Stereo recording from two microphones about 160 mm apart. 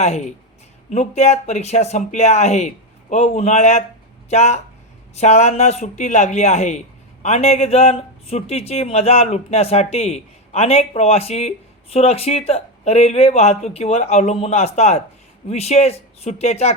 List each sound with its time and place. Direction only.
0.0 s speech: 45° left (ahead or behind)